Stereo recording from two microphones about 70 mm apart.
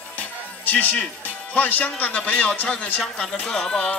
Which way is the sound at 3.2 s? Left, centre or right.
Centre.